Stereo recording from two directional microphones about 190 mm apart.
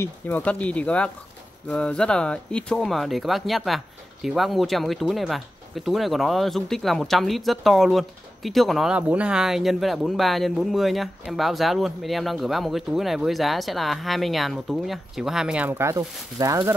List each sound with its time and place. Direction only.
0.0 s speech: 10° left (ahead or behind); by 16.7 s 20° right (ahead or behind)